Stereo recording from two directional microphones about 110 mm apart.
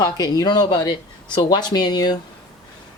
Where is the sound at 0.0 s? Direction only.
35° left (ahead or behind).